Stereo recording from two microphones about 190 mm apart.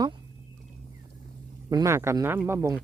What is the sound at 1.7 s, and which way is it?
Speech, 15° right (ahead or behind).